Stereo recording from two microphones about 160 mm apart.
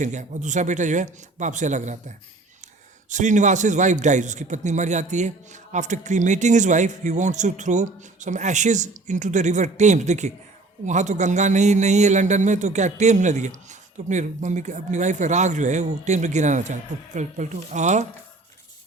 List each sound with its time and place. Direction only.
0.0 s a man's voice: 50° right (ahead or behind)